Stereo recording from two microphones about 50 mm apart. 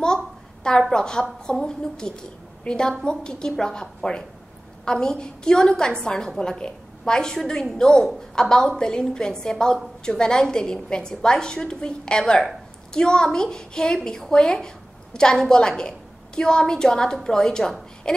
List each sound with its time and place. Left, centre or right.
0.7 s a woman's voice: centre